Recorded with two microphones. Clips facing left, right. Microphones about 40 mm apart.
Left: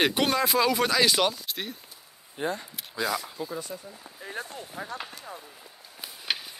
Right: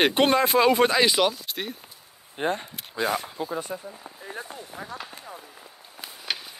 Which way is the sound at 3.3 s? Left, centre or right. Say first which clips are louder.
Right 4 dB; right.